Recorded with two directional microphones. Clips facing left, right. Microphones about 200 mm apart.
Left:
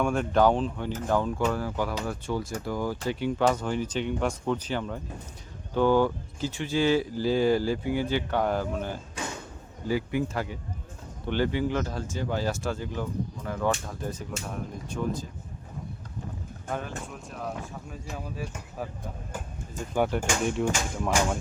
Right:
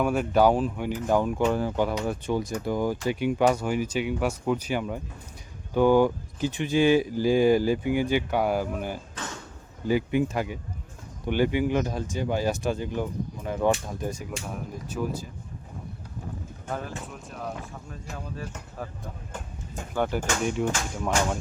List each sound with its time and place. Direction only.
0.0 s a man's voice: 5° right (ahead or behind)
9.2 s a sound: 10° left (ahead or behind)
9.8 s a man's voice: 20° right (ahead or behind)
16.6 s speech: centre (ahead or behind)
20.4 s speech: centre (ahead or behind)